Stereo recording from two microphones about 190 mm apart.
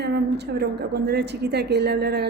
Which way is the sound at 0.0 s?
60° right (ahead or behind).